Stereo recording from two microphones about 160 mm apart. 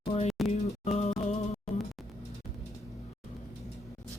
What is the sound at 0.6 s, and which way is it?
Music, 45° left (ahead or behind).